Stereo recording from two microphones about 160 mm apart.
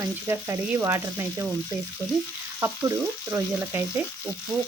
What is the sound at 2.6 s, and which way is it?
Speech, 15° right (ahead or behind).